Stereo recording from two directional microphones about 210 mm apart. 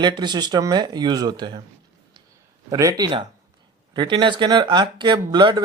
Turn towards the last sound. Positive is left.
turn(degrees=-20)  # may be behind; listen again after turning